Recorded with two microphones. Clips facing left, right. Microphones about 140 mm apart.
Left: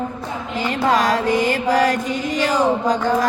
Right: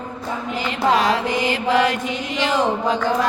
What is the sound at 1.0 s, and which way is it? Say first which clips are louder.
Mantra: left 2 dB; 45° left (ahead or behind).